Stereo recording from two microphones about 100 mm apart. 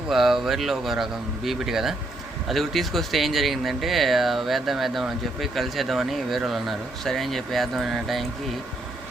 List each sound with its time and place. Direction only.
0.1 s speech: 5° right (ahead or behind)